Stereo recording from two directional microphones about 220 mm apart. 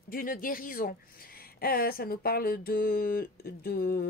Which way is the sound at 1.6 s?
45° left (ahead or behind).